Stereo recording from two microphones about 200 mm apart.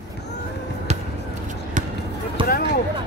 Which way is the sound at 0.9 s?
30° right (ahead or behind).